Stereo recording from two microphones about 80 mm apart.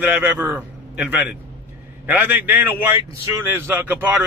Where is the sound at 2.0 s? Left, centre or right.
Right.